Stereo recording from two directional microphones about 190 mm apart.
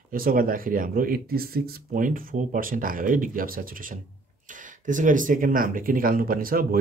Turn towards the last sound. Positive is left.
turn(degrees=-50)  # may be behind; listen again after turning